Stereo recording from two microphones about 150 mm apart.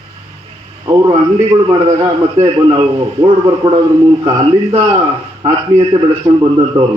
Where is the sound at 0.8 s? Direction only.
25° right (ahead or behind).